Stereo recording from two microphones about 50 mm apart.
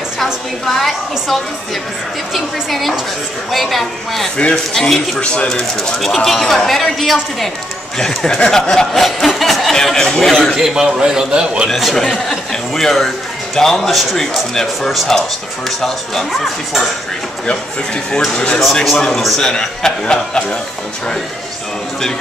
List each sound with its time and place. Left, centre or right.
0.2 s speech: centre
5.2 s speech: left
5.9 s a man's voice: centre
9.0 s a man's voice: centre
10.5 s a man's voice: centre
11.7 s a man's voice: centre
18.9 s a man's voice: centre